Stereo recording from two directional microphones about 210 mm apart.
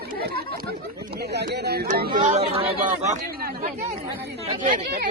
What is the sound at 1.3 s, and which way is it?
Speech, 50° right (ahead or behind).